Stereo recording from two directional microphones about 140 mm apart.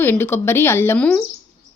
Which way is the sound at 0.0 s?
15° left (ahead or behind).